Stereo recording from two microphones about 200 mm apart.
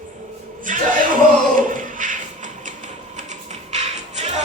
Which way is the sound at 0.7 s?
40° right (ahead or behind).